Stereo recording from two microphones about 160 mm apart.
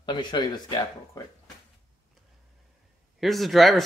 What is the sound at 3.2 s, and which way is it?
Speech, centre (ahead or behind).